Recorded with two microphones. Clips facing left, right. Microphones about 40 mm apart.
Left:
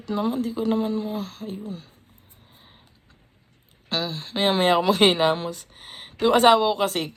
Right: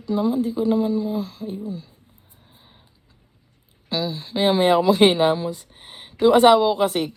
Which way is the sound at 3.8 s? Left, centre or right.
Left.